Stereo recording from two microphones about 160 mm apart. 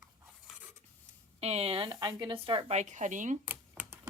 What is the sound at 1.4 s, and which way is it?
Speech, 40° right (ahead or behind).